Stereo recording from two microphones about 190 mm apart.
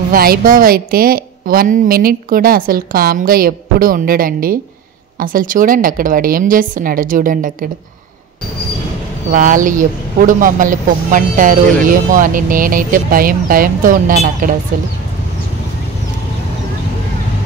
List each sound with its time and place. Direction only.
0.1 s speech: 50° right (ahead or behind)
9.3 s speech: 45° right (ahead or behind)